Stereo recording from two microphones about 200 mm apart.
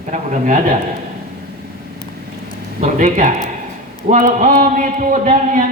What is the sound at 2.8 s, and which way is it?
A man's voice, 40° right (ahead or behind).